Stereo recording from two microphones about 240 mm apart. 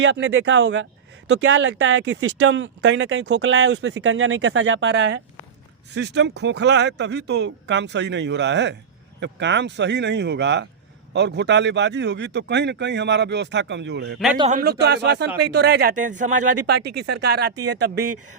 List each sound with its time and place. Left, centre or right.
0.0 s a man's voice: right
14.3 s a man's voice: right
14.6 s a man's voice: right